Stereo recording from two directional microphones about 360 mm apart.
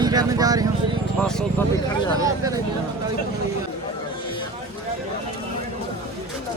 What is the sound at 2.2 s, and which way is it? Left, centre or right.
Speech, centre.